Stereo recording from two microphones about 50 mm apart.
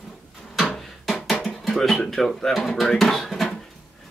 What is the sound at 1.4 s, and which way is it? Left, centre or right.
Music, centre.